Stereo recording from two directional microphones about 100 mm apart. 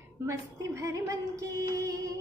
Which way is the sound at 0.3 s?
30° right (ahead or behind).